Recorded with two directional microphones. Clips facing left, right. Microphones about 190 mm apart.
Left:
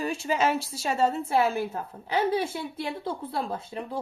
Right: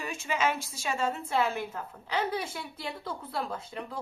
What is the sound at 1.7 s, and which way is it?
A woman's voice, 30° left (ahead or behind).